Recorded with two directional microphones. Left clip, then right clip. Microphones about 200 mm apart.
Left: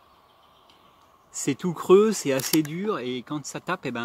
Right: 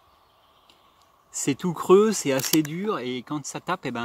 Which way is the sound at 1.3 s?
25° right (ahead or behind).